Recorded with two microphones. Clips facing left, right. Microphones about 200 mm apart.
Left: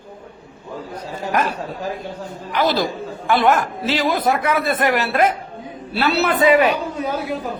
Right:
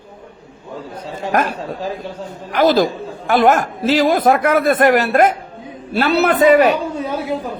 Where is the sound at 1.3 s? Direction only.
50° right (ahead or behind).